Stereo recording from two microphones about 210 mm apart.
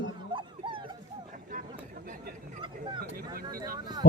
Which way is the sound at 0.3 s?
25° right (ahead or behind).